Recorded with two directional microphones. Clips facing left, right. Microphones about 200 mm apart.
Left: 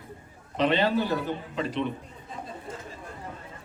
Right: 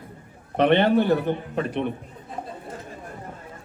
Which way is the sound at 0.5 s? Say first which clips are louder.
Right 6 dB; 60° right (ahead or behind).